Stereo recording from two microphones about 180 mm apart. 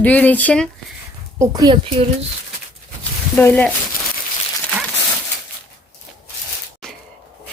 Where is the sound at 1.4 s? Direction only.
20° right (ahead or behind).